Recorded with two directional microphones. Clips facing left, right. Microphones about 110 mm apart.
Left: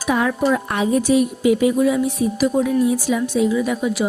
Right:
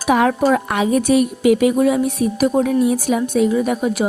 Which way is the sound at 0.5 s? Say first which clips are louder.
Right 2 dB; 90° right.